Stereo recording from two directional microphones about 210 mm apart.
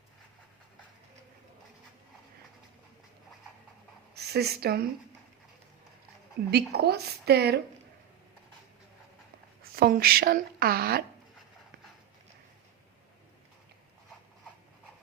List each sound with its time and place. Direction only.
4.1 s speech: 50° right (ahead or behind)
6.5 s a woman's voice: 50° right (ahead or behind)
9.7 s a woman's voice: 45° right (ahead or behind)